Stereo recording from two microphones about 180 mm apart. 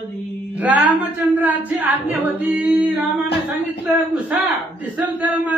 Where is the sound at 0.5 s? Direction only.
10° right (ahead or behind).